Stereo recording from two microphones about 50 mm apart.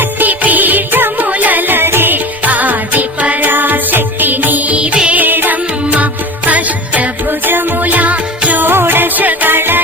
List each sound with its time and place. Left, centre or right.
0.0 s music: right
5.2 s music: right
7.3 s music: right
8.6 s music: right